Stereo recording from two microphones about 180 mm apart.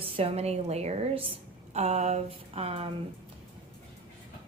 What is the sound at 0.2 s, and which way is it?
A woman's voice, 35° right (ahead or behind).